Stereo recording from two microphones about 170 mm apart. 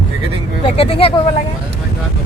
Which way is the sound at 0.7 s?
35° left (ahead or behind).